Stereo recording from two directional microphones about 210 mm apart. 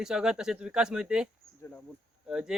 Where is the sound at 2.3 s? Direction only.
5° right (ahead or behind).